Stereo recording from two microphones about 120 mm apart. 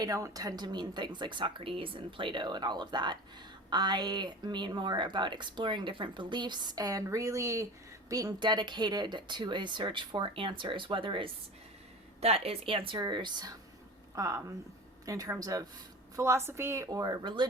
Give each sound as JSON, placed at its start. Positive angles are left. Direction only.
{"t": 0.0, "sound": "a woman's voice", "side_deg": -30}
{"t": 12.2, "sound": "speech", "side_deg": -60}
{"t": 14.2, "sound": "a woman's voice", "side_deg": -25}